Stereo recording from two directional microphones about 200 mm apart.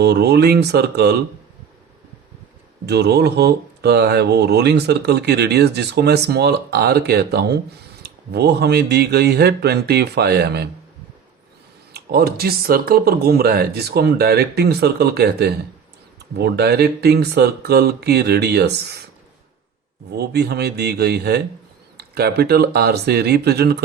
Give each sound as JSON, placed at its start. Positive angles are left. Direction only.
{"t": 0.0, "sound": "speech", "side_deg": -55}
{"t": 2.8, "sound": "speech", "side_deg": -55}
{"t": 11.9, "sound": "speech", "side_deg": -50}
{"t": 20.1, "sound": "speech", "side_deg": -55}